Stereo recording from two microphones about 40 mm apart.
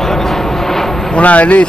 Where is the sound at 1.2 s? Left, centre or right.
Left.